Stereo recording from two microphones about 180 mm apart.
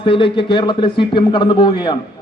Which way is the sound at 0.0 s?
30° left (ahead or behind).